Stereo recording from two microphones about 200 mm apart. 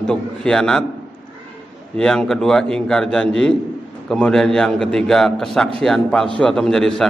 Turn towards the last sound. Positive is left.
turn(degrees=0)  # may be behind; listen again after turning